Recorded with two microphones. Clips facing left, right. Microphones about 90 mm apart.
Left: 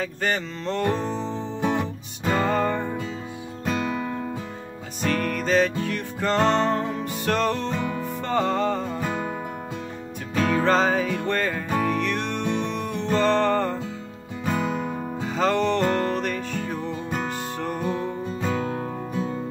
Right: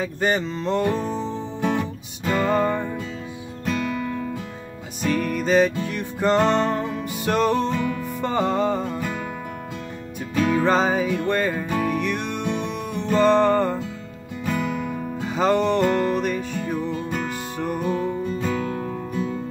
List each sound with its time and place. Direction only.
0.0 s music: 15° right (ahead or behind)
1.6 s music: 15° left (ahead or behind)
2.5 s music: 5° right (ahead or behind)
5.0 s music: 10° right (ahead or behind)
10.3 s music: 10° right (ahead or behind)
14.4 s music: 30° left (ahead or behind)
15.2 s music: 10° right (ahead or behind)
18.6 s music: 20° left (ahead or behind)